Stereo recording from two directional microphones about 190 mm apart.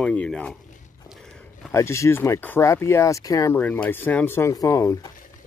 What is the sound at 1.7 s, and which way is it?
Speech, 15° left (ahead or behind).